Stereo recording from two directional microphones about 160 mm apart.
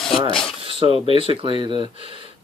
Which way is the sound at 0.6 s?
35° right (ahead or behind).